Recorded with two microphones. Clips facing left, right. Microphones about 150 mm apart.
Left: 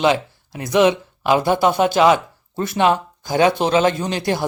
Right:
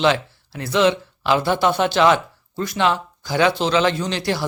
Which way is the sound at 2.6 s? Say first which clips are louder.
Left 3 dB; 20° left (ahead or behind).